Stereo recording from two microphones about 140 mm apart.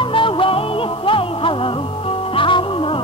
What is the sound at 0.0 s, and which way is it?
Music, 40° left (ahead or behind).